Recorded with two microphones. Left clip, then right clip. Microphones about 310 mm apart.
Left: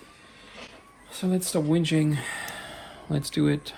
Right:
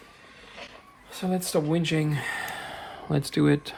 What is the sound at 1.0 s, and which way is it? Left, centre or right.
Speech, right.